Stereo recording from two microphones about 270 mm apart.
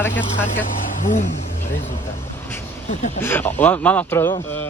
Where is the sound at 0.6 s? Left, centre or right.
Left.